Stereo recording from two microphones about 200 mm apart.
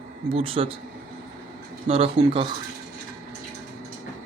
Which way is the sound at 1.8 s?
30° right (ahead or behind).